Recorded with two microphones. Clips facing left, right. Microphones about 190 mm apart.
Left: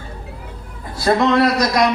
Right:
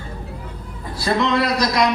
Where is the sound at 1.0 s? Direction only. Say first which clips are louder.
Left 5 dB; 50° left (ahead or behind).